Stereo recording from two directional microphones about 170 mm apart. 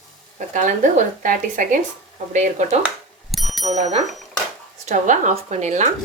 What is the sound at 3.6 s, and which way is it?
Speech, 40° right (ahead or behind).